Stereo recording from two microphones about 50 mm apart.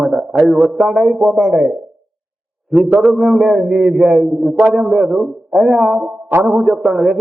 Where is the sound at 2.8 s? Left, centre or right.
Centre.